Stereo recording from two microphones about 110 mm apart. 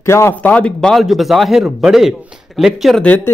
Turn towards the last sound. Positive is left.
turn(degrees=15)  # may be behind; listen again after turning